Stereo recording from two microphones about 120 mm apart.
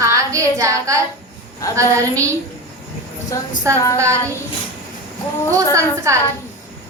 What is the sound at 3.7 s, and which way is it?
Speech, 25° right (ahead or behind).